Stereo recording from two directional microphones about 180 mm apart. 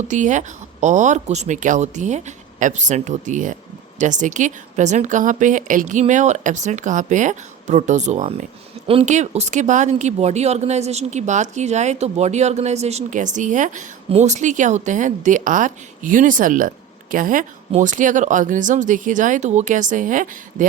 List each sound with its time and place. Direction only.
0.1 s speech: 45° right (ahead or behind)